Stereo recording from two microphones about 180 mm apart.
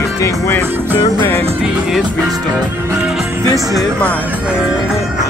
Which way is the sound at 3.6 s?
Centre (ahead or behind).